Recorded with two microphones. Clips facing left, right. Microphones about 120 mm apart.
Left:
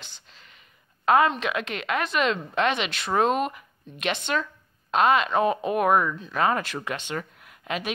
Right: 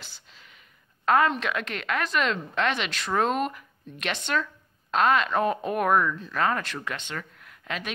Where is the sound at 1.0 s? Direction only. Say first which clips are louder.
Left 2 dB; 5° left (ahead or behind).